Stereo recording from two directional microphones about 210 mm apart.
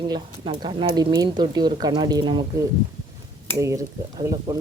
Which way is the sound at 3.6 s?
15° right (ahead or behind).